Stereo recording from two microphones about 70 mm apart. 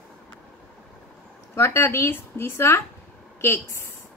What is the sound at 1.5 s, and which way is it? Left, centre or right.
A woman's voice, left.